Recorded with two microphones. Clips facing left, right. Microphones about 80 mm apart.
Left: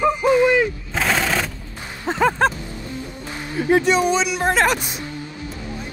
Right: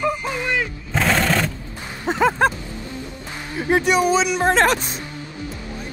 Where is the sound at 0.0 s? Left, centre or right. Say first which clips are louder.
Left 8 dB; centre.